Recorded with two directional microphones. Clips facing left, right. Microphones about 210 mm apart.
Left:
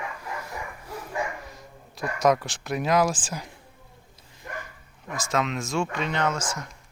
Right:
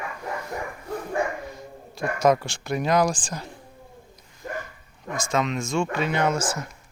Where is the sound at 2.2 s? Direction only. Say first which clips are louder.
Right 1 dB; centre (ahead or behind).